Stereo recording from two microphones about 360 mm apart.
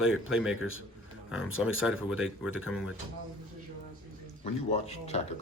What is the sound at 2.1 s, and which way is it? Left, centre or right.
Speech, left.